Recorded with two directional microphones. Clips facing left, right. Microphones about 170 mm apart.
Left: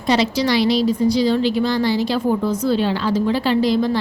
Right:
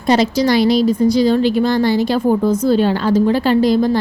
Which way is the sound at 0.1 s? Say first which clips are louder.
Right 4 dB; 45° right (ahead or behind).